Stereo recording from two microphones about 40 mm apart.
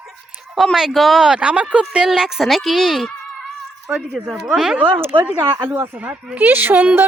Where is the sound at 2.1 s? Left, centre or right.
Centre.